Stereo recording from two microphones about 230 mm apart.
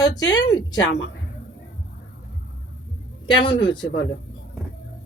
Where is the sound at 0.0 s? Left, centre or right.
Centre.